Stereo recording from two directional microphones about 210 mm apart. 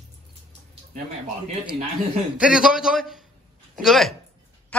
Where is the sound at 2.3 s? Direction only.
5° right (ahead or behind).